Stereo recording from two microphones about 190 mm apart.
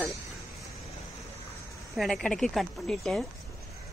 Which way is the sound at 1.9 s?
Centre (ahead or behind).